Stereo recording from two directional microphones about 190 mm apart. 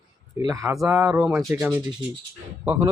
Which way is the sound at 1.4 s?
15° right (ahead or behind).